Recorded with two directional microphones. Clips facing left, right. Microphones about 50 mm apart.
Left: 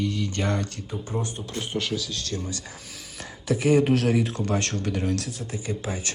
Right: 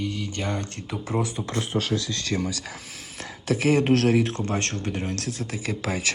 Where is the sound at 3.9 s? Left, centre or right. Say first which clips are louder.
Right 2 dB; right.